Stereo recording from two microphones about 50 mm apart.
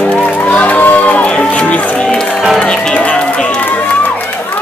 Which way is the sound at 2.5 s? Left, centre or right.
Centre.